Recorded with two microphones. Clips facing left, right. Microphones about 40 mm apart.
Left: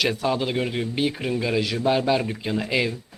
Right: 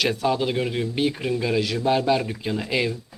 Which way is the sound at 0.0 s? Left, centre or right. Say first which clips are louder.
Right 1 dB; centre.